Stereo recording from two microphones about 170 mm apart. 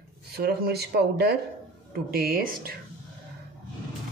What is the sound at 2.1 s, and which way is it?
Speech, 60° right (ahead or behind).